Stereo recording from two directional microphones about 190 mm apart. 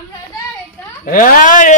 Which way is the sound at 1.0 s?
45° left (ahead or behind).